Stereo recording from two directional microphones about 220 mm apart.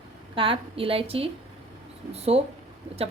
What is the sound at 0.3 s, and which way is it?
A woman's voice, 25° right (ahead or behind).